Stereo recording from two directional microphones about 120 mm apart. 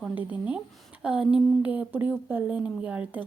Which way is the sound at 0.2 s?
10° right (ahead or behind).